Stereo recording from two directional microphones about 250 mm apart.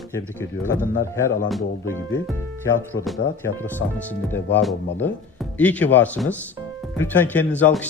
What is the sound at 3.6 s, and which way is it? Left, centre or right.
Speech, centre.